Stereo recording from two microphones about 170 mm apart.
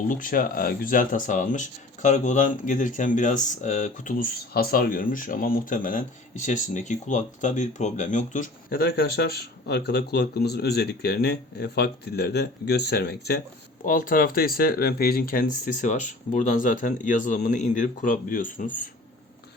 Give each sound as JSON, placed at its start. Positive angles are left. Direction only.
{"t": 0.1, "sound": "speech", "side_deg": 55}
{"t": 13.8, "sound": "speech", "side_deg": 50}